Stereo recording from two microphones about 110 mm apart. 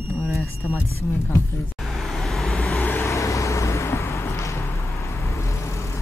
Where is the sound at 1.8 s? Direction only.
Centre (ahead or behind).